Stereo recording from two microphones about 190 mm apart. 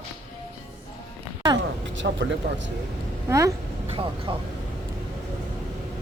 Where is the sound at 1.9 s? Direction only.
70° right (ahead or behind).